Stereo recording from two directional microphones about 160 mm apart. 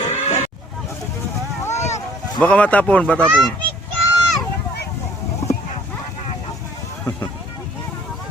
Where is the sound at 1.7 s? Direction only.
45° left (ahead or behind).